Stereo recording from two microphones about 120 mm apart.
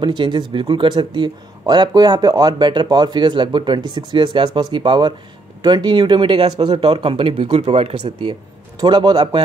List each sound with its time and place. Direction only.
0.0 s speech: 40° right (ahead or behind); by 8.1 s 60° right (ahead or behind)
8.3 s speech: 40° right (ahead or behind)